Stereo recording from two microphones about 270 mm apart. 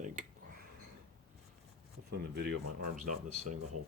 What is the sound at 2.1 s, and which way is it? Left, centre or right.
Speech, right.